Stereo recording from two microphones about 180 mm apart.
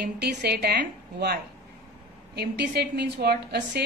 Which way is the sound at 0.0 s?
65° right (ahead or behind).